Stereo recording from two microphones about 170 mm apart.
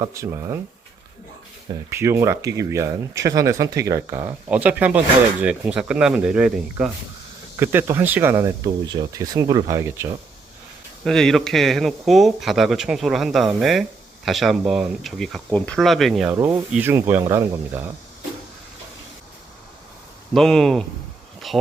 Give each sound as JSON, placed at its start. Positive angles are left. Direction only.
{"t": 0.0, "sound": "speech", "side_deg": -20}
{"t": 1.9, "sound": "speech", "side_deg": -15}
{"t": 11.0, "sound": "speech", "side_deg": 5}
{"t": 16.3, "sound": "speech", "side_deg": -15}
{"t": 20.3, "sound": "speech", "side_deg": 0}